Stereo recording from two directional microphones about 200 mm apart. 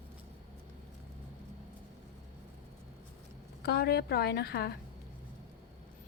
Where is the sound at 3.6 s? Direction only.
50° left (ahead or behind).